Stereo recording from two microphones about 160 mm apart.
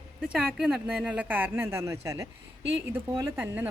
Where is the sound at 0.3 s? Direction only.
5° right (ahead or behind).